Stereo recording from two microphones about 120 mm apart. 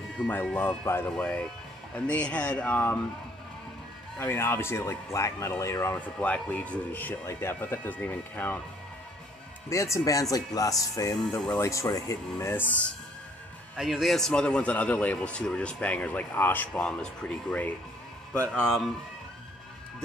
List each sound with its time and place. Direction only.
0.6 s speech: 20° left (ahead or behind)
4.2 s speech: 15° left (ahead or behind)
9.7 s speech: 25° left (ahead or behind)
13.7 s speech: 5° right (ahead or behind)